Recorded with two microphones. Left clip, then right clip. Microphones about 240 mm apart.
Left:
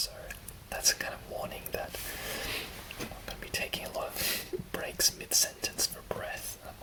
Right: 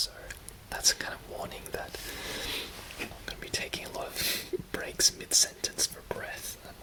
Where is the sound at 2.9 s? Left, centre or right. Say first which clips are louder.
Right 2 dB; right.